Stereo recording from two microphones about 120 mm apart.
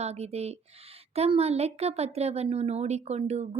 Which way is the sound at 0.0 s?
60° right (ahead or behind).